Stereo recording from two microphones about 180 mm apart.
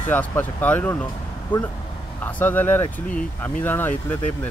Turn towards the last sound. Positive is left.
turn(degrees=10)  # may be behind; listen again after turning